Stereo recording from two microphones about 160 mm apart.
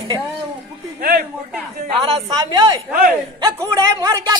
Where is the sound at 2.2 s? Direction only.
25° right (ahead or behind).